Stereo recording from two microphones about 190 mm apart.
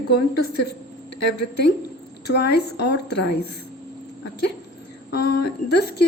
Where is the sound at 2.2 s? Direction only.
60° left (ahead or behind).